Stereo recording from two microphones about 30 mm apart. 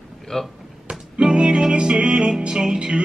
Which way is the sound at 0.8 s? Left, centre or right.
Right.